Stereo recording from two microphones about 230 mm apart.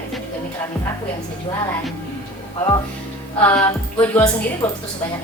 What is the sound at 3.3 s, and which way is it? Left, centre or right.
Music, centre.